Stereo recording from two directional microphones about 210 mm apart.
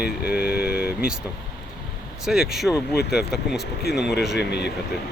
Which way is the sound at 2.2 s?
Centre (ahead or behind).